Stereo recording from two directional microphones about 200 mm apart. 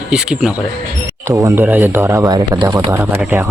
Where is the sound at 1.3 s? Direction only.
15° right (ahead or behind).